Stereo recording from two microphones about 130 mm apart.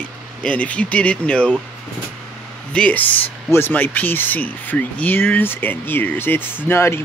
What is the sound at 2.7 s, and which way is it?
Speech, 10° left (ahead or behind).